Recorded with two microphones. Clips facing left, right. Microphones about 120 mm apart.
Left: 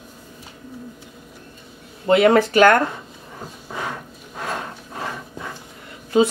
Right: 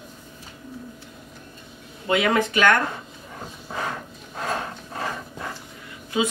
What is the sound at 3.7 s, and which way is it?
Dog, 5° left (ahead or behind).